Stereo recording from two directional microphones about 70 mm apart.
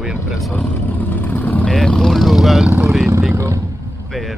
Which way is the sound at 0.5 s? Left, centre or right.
Left.